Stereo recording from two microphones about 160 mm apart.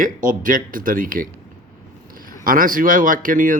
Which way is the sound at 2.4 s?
60° right (ahead or behind).